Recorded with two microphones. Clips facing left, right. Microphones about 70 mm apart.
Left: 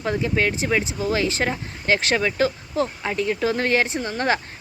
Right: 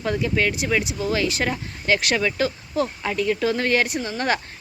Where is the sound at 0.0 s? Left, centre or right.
Left.